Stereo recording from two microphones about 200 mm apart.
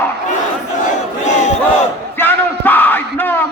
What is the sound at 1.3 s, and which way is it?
Battle cry, 35° left (ahead or behind).